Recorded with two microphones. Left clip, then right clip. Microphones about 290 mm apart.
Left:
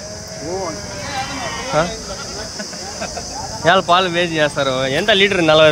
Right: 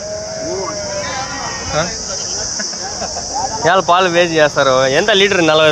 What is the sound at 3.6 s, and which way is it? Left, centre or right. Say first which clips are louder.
Speech: right 1 dB; centre.